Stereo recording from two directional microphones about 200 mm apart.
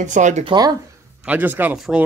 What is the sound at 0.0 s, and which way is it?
Speech, 35° right (ahead or behind).